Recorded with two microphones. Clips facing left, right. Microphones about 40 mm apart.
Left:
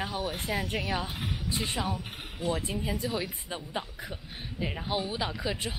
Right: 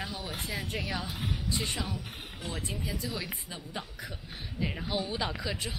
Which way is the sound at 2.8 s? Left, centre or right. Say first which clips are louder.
Left 4 dB; left.